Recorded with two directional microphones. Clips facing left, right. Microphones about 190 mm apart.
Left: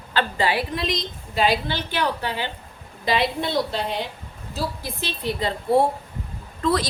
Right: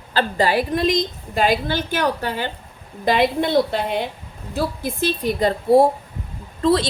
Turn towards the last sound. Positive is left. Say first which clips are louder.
# right 5 dB
turn(degrees=-30)  # may be behind; listen again after turning